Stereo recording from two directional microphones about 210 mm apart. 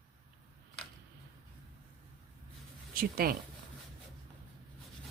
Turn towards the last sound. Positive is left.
turn(degrees=-45)  # may be behind; listen again after turning